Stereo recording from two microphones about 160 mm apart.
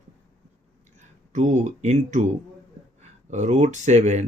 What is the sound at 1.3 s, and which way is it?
Speech, 50° right (ahead or behind).